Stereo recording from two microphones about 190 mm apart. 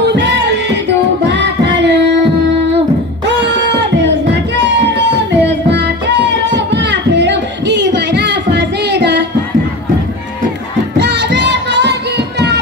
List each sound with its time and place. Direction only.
0.0 s music: 65° right (ahead or behind)
4.0 s music: 65° right (ahead or behind)
11.0 s music: 65° right (ahead or behind)